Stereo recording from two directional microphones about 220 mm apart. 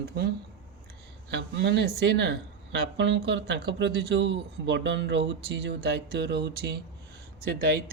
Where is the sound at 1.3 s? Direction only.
50° right (ahead or behind).